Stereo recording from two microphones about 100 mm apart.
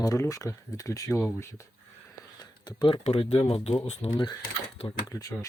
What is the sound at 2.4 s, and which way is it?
Speech, 45° left (ahead or behind).